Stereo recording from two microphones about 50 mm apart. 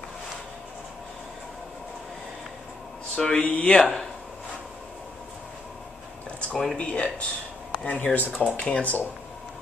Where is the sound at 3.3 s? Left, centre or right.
Left.